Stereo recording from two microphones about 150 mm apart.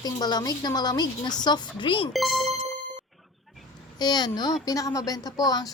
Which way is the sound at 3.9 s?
25° left (ahead or behind).